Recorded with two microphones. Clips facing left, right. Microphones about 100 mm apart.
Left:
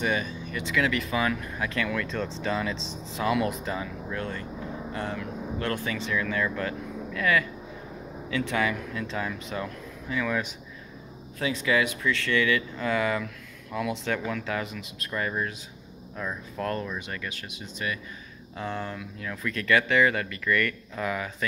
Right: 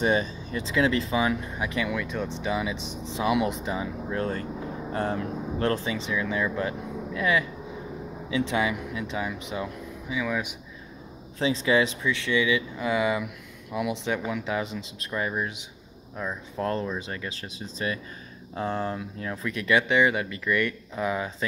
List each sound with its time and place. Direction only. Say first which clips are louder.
0.0 s speech: right 4 dB; 30° right (ahead or behind); by 10.5 s 5° right (ahead or behind)
11.3 s speech: right 3 dB; 25° right (ahead or behind)
19.5 s speech: even; 20° right (ahead or behind)